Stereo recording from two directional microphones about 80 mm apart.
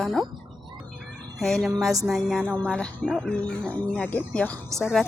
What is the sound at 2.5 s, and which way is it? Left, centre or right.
Speech, centre.